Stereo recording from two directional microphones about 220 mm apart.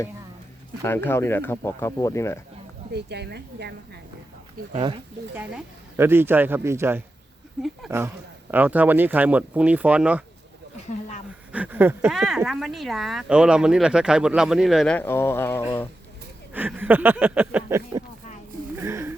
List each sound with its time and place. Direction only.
0.8 s speech: 10° left (ahead or behind)
2.9 s a woman's voice: 50° right (ahead or behind)
5.3 s speech: 10° right (ahead or behind)
11.5 s speech: 10° right (ahead or behind); by 15.9 s 10° left (ahead or behind)
16.5 s speech: 10° right (ahead or behind)
18.8 s a sound: 10° right (ahead or behind)